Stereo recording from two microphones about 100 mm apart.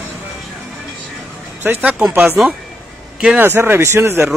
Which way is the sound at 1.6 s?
20° right (ahead or behind).